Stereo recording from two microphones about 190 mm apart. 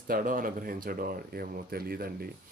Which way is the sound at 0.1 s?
45° right (ahead or behind).